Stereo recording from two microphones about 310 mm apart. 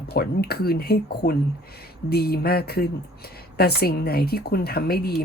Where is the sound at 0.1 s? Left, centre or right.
Left.